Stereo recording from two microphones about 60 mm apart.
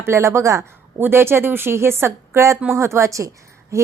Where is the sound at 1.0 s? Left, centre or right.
Right.